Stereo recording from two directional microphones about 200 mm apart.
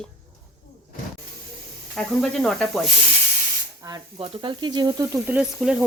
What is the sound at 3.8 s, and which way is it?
Speech, 20° right (ahead or behind).